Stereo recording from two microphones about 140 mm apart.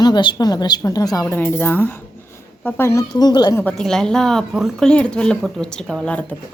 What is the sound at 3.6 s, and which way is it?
Speech, 5° left (ahead or behind).